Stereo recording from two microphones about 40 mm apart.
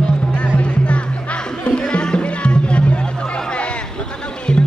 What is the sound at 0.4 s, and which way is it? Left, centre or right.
Music, left.